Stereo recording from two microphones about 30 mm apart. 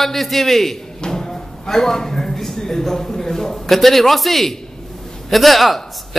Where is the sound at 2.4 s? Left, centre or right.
Centre.